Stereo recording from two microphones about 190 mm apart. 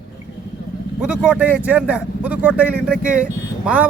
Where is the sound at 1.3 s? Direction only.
10° right (ahead or behind).